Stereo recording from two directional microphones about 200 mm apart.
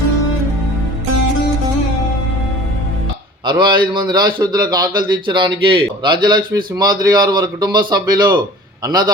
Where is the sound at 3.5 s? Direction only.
25° right (ahead or behind).